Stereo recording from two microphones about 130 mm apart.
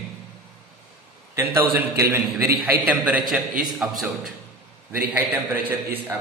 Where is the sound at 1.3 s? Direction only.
20° right (ahead or behind).